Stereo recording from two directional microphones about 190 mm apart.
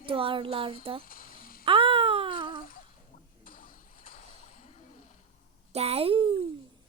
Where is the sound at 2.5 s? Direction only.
50° left (ahead or behind).